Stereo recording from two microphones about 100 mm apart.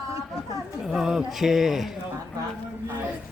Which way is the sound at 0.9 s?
5° right (ahead or behind).